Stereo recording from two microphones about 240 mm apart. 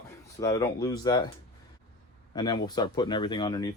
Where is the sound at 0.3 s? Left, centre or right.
Centre.